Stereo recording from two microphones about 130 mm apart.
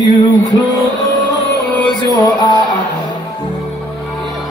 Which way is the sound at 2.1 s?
30° left (ahead or behind).